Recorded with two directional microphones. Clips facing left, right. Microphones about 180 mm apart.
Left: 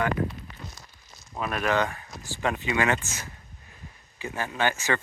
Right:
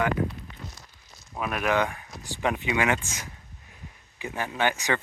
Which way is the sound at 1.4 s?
10° right (ahead or behind).